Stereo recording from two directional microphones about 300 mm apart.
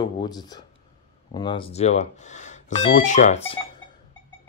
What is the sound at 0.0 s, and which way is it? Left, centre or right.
Speech, centre.